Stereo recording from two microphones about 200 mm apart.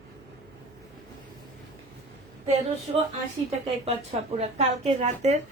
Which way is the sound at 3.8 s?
30° right (ahead or behind).